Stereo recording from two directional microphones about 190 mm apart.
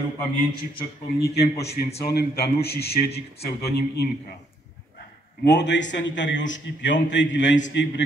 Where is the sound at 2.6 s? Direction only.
55° left (ahead or behind).